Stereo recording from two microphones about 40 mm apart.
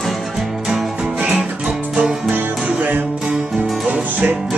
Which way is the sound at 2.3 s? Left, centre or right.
Right.